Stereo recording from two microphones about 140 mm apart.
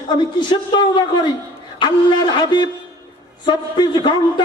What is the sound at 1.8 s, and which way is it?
A man's voice, 30° left (ahead or behind).